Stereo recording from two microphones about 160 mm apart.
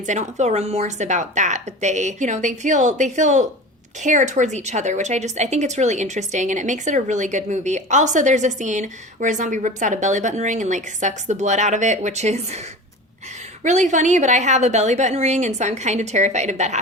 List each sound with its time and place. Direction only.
0.0 s a woman's voice: 50° right (ahead or behind)
13.7 s a woman's voice: 50° right (ahead or behind)